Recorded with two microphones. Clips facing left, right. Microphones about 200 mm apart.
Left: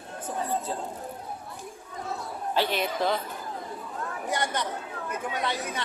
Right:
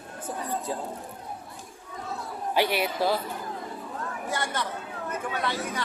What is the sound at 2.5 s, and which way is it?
Speech, 10° right (ahead or behind).